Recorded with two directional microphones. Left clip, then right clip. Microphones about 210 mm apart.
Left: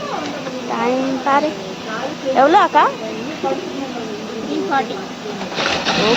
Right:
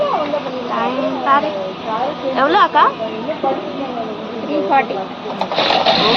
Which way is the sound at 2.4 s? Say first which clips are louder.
Even; 40° left (ahead or behind).